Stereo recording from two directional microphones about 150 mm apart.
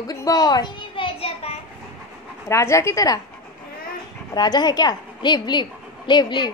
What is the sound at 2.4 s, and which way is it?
Speech, 20° left (ahead or behind).